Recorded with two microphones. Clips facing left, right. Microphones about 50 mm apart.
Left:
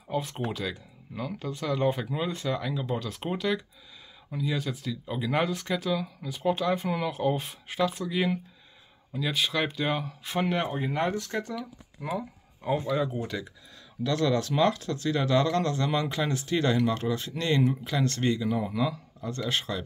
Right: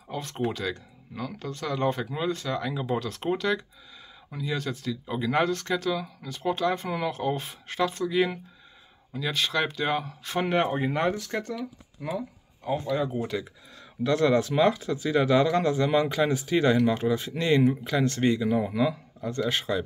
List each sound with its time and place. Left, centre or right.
0.1 s speech: centre
2.7 s speech: centre
10.9 s speech: centre
11.1 s speech: centre
12.2 s speech: centre
12.9 s speech: centre
14.0 s speech: right
14.5 s speech: centre